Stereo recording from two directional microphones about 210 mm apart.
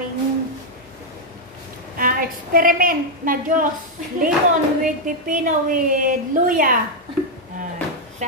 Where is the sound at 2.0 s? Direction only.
40° right (ahead or behind).